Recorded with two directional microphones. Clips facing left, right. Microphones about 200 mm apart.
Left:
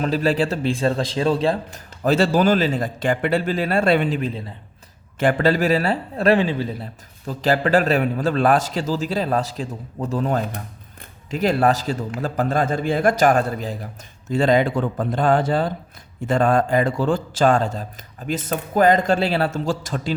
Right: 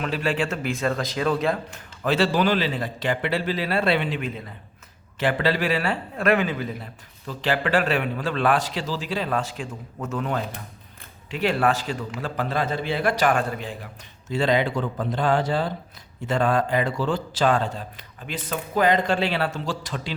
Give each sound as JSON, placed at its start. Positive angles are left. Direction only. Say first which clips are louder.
{"t": 0.0, "sound": "a man's voice", "louder": "left 5 dB", "side_deg": 35}
{"t": 2.0, "sound": "a man's voice", "louder": "left 4 dB", "side_deg": 45}